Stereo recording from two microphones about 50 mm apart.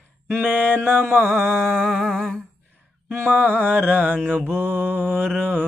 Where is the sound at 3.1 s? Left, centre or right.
Right.